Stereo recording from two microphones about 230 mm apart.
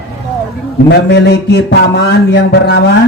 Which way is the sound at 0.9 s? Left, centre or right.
Left.